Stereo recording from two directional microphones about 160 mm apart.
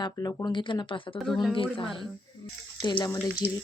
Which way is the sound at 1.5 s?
35° left (ahead or behind).